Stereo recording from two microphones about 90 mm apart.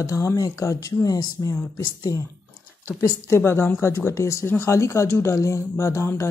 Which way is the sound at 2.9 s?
35° left (ahead or behind).